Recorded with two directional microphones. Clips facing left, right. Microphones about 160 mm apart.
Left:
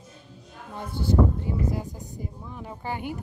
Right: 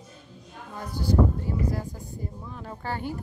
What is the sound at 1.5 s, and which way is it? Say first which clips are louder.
Speech: left 1 dB; 20° left (ahead or behind).